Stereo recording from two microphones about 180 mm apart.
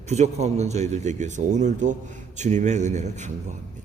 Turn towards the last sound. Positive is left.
turn(degrees=-40)  # may be behind; listen again after turning